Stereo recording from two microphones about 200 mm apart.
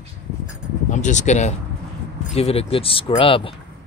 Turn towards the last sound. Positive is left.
turn(degrees=25)  # may be behind; listen again after turning